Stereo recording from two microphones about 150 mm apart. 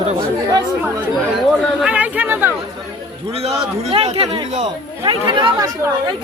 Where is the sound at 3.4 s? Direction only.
40° right (ahead or behind).